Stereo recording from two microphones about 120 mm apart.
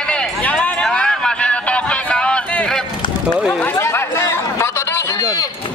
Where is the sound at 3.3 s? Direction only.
5° right (ahead or behind).